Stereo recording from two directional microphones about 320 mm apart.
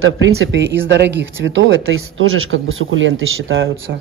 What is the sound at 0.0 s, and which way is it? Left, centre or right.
Speech, right.